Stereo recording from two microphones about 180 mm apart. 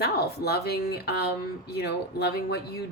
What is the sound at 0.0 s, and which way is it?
Speech, 60° left (ahead or behind).